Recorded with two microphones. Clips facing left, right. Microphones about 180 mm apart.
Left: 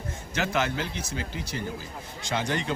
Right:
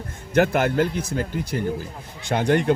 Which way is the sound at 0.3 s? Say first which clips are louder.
Right 9 dB; 55° right (ahead or behind).